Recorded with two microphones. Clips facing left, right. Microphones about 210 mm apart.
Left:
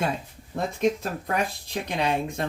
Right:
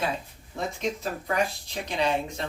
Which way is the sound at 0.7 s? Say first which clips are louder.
Left 9 dB; 55° left (ahead or behind).